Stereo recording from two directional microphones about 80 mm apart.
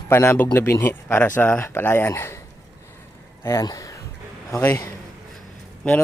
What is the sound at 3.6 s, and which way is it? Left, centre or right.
Speech, left.